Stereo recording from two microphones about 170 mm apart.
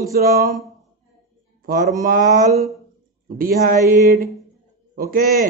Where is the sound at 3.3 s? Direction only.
60° right (ahead or behind).